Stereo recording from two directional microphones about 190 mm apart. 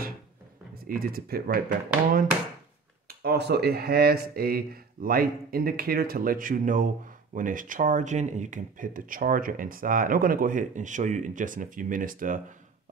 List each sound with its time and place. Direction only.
0.8 s speech: 50° right (ahead or behind)
3.1 s speech: 55° right (ahead or behind)